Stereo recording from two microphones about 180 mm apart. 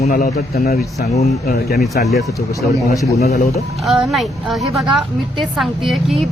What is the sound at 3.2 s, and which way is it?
Speech, 60° left (ahead or behind).